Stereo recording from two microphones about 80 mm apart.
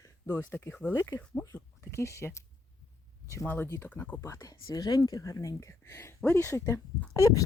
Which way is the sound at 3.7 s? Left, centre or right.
Left.